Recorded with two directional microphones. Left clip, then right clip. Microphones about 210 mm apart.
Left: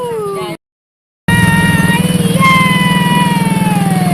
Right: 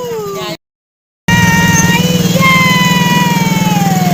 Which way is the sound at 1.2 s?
20° right (ahead or behind).